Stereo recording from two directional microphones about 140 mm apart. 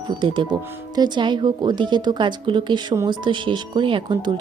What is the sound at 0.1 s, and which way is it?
Speech, 35° right (ahead or behind).